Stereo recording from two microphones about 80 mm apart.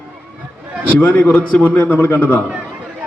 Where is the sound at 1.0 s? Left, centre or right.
Left.